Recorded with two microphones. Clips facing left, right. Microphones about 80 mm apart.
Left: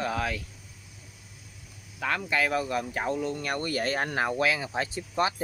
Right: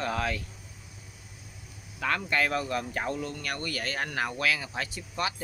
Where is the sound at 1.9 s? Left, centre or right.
Centre.